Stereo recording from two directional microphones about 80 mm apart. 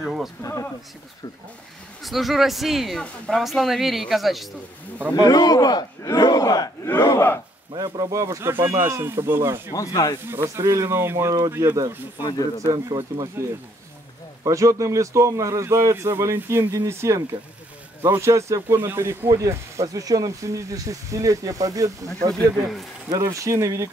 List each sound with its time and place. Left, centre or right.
0.0 s a sound: centre
0.4 s speech: left
2.0 s speech: centre
3.0 s speech: centre
3.3 s speech: centre
4.9 s speech: right
5.2 s speech: left
7.1 s speech: left
7.7 s speech: right
9.8 s speech: left
10.2 s speech: right
12.2 s speech: left
12.7 s speech: right
14.4 s speech: right